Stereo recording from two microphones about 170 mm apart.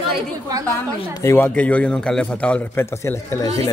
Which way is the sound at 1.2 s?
15° left (ahead or behind).